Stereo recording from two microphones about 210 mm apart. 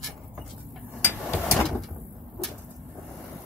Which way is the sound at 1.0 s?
10° left (ahead or behind).